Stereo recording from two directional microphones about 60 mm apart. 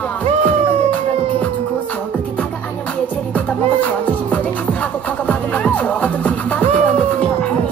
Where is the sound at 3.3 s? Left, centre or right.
Left.